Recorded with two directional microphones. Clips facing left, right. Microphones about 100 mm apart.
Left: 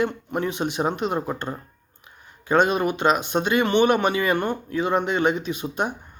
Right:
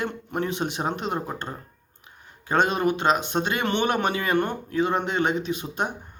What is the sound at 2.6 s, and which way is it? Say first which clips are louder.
Speech: left 1 dB; 30° right (ahead or behind).